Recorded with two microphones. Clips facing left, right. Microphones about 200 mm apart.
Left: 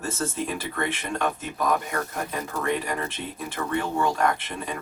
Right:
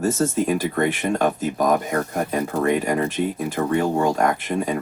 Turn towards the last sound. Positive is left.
turn(degrees=-45)  # may be behind; listen again after turning